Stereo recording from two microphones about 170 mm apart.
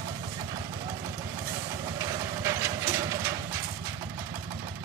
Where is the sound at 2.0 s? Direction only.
20° right (ahead or behind).